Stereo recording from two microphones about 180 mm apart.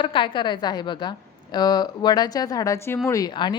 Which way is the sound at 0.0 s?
30° left (ahead or behind).